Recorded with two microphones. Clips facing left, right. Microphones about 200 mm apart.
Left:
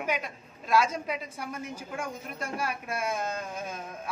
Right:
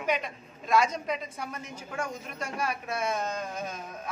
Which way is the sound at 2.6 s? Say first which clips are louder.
Right 2 dB; 10° left (ahead or behind).